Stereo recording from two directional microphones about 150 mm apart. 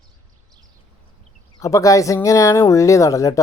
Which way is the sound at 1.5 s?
20° left (ahead or behind).